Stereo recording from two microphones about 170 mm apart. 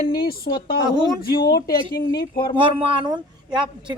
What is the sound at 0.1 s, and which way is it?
Speech, 65° left (ahead or behind).